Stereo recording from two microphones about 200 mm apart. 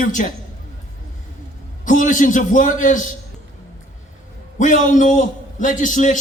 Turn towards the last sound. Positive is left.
turn(degrees=40)  # may be behind; listen again after turning